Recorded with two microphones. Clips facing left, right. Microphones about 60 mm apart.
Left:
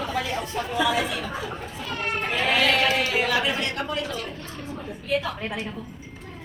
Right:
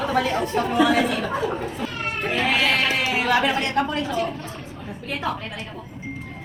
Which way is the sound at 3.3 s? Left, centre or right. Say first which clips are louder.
Right 4 dB; right.